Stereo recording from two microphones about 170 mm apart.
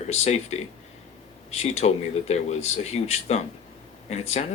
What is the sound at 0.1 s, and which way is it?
Speech, 40° left (ahead or behind).